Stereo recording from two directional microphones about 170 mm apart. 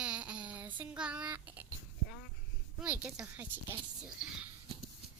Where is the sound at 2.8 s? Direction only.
10° right (ahead or behind).